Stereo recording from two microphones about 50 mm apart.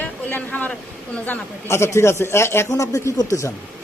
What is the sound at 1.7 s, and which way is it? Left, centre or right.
A man's voice, left.